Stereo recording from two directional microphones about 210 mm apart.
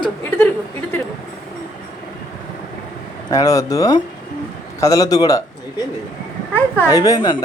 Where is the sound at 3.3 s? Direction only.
15° left (ahead or behind).